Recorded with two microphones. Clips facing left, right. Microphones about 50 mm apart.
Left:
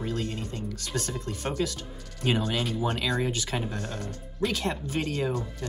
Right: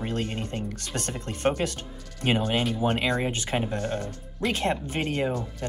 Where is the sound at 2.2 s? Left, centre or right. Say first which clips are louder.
Right 3 dB; right.